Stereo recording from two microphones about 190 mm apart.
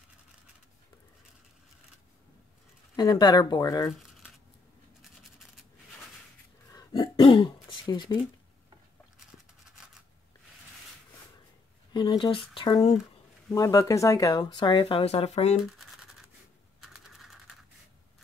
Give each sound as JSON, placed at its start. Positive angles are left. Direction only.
{"t": 3.0, "sound": "speech", "side_deg": 20}
{"t": 6.7, "sound": "throat clearing", "side_deg": 20}
{"t": 11.9, "sound": "speech", "side_deg": 25}
{"t": 15.8, "sound": "a sound", "side_deg": 0}
{"t": 16.8, "sound": "typing", "side_deg": 0}